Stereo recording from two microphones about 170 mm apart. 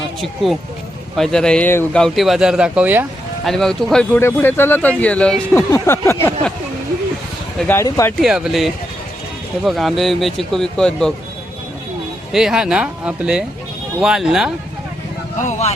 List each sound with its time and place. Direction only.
1.1 s speech: 5° left (ahead or behind)
3.4 s speech: centre (ahead or behind)
7.9 s speech: 20° left (ahead or behind)
8.2 s speech: 5° right (ahead or behind)
12.3 s speech: 5° right (ahead or behind)
15.4 s speech: 45° left (ahead or behind)